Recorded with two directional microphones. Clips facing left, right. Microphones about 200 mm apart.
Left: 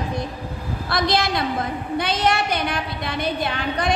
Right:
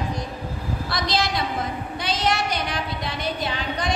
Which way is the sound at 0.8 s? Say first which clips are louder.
Left 4 dB; 55° left (ahead or behind).